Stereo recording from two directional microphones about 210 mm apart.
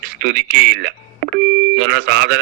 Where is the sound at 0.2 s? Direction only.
50° right (ahead or behind).